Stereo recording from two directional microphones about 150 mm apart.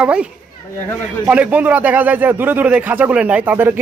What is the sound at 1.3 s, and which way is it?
A man's voice, 10° right (ahead or behind).